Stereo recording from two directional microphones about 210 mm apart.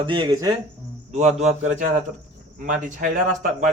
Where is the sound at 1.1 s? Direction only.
30° right (ahead or behind).